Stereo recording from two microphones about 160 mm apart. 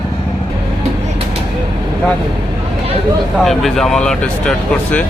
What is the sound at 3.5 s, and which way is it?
Speech, centre (ahead or behind).